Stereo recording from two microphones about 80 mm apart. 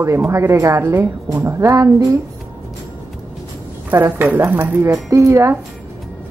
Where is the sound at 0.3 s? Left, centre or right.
Right.